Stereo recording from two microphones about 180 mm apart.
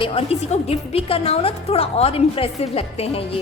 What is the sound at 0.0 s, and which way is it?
A woman's voice, 30° left (ahead or behind).